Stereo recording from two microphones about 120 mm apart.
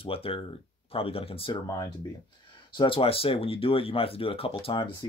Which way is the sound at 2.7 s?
45° left (ahead or behind).